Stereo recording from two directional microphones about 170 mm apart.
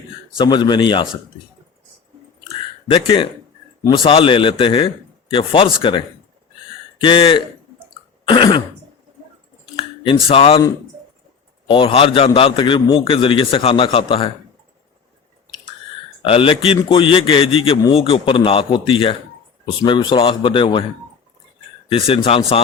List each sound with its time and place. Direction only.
0.3 s speech: 25° left (ahead or behind)
2.8 s a man's voice: 30° left (ahead or behind)
7.0 s speech: 30° left (ahead or behind)
8.2 s throat clearing: 25° left (ahead or behind)
9.7 s a sound: 30° left (ahead or behind)
10.2 s a man's voice: 35° left (ahead or behind)
11.7 s a man's voice: 30° left (ahead or behind)
16.2 s a man's voice: 30° left (ahead or behind)
21.8 s a man's voice: 30° left (ahead or behind)